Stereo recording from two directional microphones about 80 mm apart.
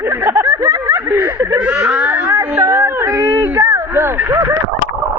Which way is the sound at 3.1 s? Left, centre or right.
Right.